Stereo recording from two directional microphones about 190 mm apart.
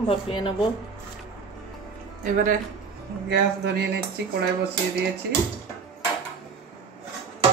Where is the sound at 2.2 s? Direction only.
45° right (ahead or behind).